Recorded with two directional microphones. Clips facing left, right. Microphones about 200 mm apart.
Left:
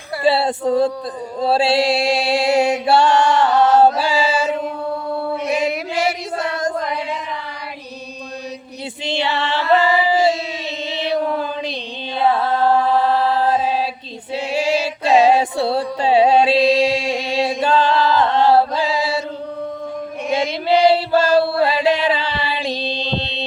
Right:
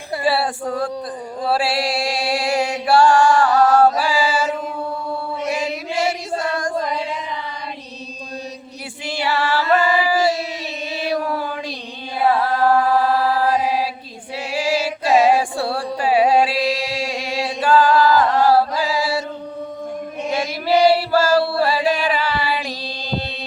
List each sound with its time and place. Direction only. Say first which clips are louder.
0.2 s female singing: left 4 dB; 25° left (ahead or behind)
1.4 s chant: left 4 dB; 25° left (ahead or behind)
9.0 s female singing: even; 20° left (ahead or behind)
10.8 s chant: left 2 dB; 20° left (ahead or behind)
14.3 s female singing: left 2 dB; 25° left (ahead or behind)
20.3 s choir: left 2 dB; 20° left (ahead or behind)
21.6 s music: left 2 dB; 20° left (ahead or behind)